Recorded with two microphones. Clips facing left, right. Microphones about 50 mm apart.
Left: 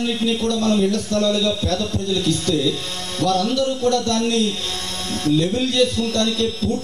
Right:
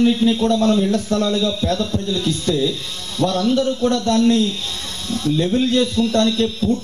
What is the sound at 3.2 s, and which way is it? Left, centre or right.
Speech, left.